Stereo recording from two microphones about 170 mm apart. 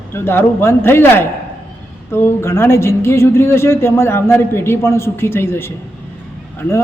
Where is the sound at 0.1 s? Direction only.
15° left (ahead or behind).